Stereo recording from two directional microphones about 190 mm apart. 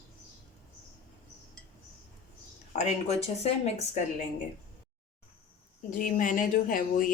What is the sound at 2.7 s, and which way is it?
A woman's voice, 35° left (ahead or behind).